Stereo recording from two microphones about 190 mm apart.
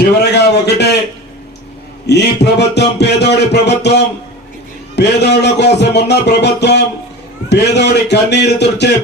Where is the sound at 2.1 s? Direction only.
60° left (ahead or behind).